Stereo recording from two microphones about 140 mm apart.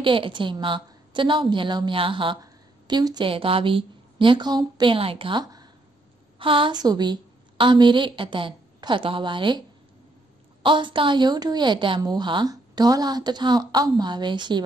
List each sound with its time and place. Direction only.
0.0 s a woman's voice: 35° right (ahead or behind)
3.3 s a woman's voice: 40° right (ahead or behind)
10.6 s a woman's voice: 35° right (ahead or behind)